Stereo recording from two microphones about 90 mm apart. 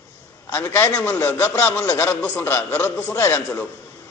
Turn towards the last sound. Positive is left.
turn(degrees=15)  # may be behind; listen again after turning